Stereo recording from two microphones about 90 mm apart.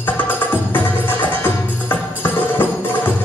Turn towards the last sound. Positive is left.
turn(degrees=25)  # may be behind; listen again after turning